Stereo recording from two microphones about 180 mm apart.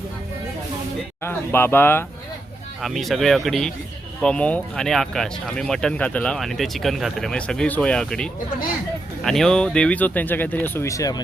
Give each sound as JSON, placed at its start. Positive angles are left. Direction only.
{"t": 1.2, "sound": "speech", "side_deg": 10}
{"t": 2.8, "sound": "speech", "side_deg": 0}